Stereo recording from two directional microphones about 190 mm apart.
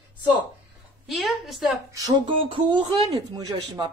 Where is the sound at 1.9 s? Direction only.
20° right (ahead or behind).